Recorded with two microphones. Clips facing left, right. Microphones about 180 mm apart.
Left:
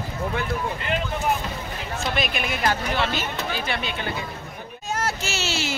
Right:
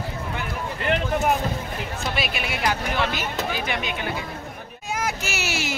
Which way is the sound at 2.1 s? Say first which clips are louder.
Left 3 dB; 5° right (ahead or behind).